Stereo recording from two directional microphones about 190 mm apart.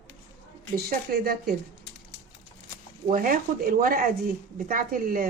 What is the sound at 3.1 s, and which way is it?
Speech, 45° right (ahead or behind).